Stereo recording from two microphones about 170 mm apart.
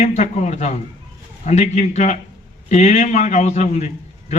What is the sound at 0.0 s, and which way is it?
A man's voice, 40° left (ahead or behind).